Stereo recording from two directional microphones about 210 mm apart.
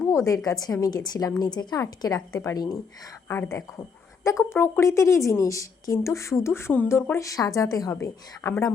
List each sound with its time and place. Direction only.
0.0 s a woman's voice: 15° left (ahead or behind)